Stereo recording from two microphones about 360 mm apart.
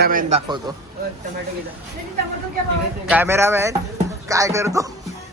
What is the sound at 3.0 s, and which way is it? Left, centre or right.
A man's voice, centre.